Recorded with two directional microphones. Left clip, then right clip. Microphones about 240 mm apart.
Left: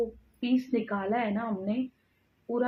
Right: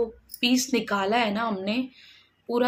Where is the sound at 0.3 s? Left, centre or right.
Centre.